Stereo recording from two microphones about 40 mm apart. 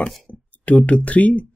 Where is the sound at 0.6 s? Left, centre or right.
Left.